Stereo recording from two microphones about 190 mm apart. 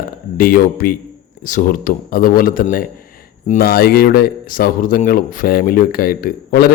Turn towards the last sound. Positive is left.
turn(degrees=55)  # may be behind; listen again after turning